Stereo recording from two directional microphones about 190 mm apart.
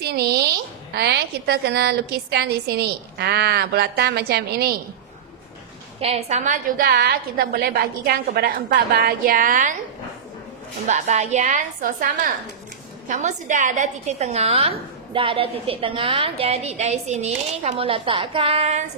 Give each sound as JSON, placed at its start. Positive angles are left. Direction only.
{"t": 0.0, "sound": "a woman's voice", "side_deg": -55}
{"t": 5.9, "sound": "a woman's voice", "side_deg": -30}
{"t": 10.9, "sound": "a woman's voice", "side_deg": -40}